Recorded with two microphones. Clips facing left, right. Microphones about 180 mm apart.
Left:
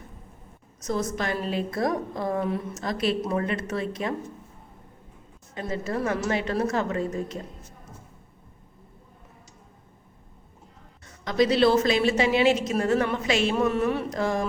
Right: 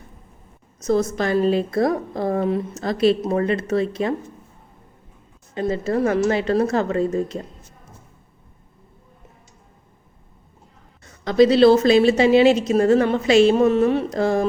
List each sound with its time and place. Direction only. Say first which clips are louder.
0.9 s a woman's voice: right 8 dB; 35° right (ahead or behind)
5.5 s a woman's voice: right 8 dB; 30° right (ahead or behind)
11.3 s a woman's voice: right 7 dB; 30° right (ahead or behind)